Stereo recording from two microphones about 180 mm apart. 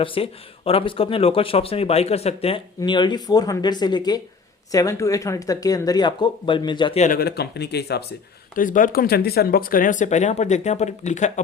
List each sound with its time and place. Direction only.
0.0 s speech: 30° left (ahead or behind)
7.0 s speech: 55° left (ahead or behind)
8.5 s speech: 50° left (ahead or behind)